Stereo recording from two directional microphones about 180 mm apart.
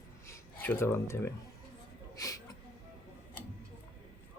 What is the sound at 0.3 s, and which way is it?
Speech, 10° left (ahead or behind).